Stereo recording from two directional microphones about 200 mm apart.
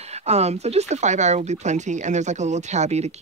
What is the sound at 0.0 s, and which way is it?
Speech, 30° right (ahead or behind).